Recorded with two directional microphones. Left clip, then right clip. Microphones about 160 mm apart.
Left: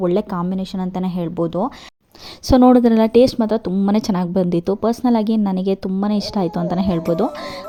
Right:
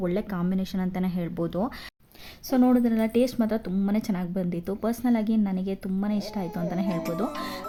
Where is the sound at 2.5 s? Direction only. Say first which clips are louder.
Left 11 dB; 45° left (ahead or behind).